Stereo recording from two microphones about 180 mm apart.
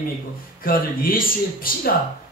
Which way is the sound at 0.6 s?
55° left (ahead or behind).